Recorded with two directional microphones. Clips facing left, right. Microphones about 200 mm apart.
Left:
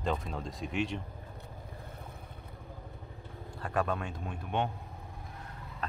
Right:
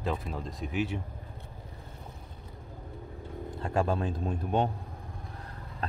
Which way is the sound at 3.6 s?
25° right (ahead or behind).